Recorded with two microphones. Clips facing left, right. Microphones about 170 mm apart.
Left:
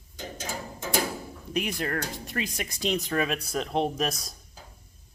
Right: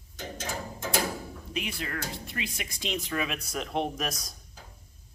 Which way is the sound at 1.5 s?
45° left (ahead or behind).